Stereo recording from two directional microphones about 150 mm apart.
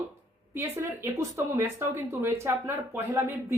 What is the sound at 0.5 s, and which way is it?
A man's voice, 15° right (ahead or behind).